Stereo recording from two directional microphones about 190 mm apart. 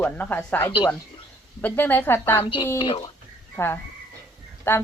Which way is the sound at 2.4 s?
20° left (ahead or behind).